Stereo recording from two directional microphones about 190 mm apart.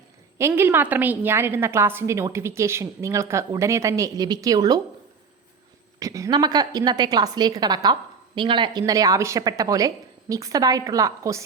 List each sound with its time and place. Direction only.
0.3 s a woman's voice: 15° right (ahead or behind)
6.0 s a woman's voice: 15° right (ahead or behind)